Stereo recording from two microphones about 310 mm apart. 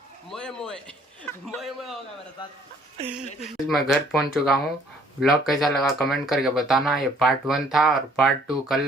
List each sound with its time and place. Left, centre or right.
0.3 s speech: centre
3.4 s speech: centre